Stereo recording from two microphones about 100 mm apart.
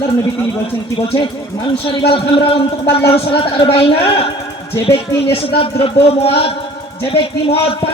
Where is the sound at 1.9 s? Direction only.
60° left (ahead or behind).